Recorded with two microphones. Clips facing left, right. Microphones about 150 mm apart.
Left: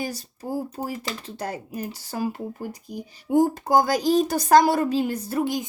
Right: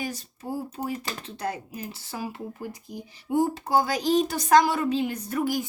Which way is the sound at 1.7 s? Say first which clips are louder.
Left 5 dB; 45° left (ahead or behind).